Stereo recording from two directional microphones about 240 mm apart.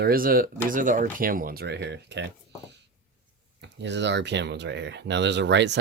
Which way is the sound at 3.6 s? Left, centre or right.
Right.